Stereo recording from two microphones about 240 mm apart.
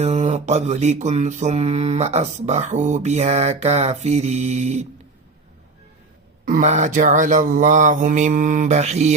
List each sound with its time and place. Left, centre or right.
0.0 s mantra: right
6.4 s speech: right